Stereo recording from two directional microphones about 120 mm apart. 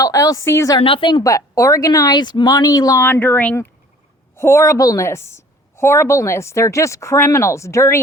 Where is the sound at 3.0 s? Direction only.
20° left (ahead or behind).